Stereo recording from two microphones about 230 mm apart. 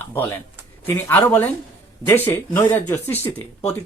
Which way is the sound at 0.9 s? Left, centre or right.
Centre.